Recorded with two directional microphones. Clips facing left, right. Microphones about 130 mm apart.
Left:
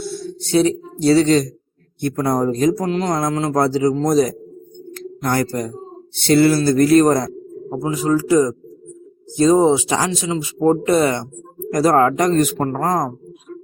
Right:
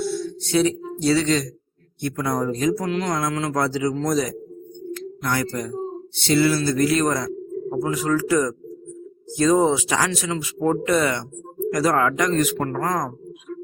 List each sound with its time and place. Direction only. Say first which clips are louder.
0.2 s a man's voice: left 7 dB; 30° left (ahead or behind)
7.7 s a man's voice: left 4 dB; 25° left (ahead or behind)